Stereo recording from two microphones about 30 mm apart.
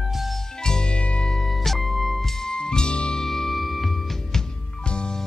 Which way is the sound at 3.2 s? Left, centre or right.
Centre.